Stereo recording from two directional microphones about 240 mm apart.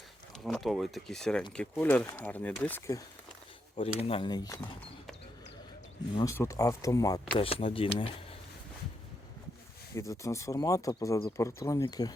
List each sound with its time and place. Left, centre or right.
0.3 s speech: centre
4.0 s speech: left
6.1 s speech: centre
9.9 s speech: centre